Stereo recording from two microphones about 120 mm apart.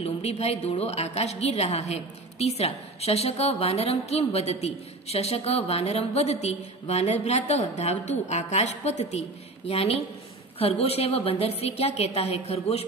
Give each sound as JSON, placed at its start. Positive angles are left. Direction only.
{"t": 0.0, "sound": "a woman's voice", "side_deg": 60}
{"t": 9.7, "sound": "a woman's voice", "side_deg": 55}